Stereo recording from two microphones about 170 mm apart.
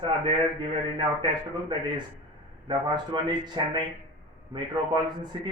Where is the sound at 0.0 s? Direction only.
30° right (ahead or behind).